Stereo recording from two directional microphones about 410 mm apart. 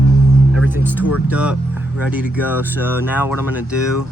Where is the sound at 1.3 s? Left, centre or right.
Centre.